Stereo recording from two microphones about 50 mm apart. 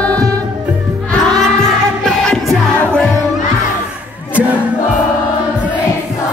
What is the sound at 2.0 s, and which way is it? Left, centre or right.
Music, centre.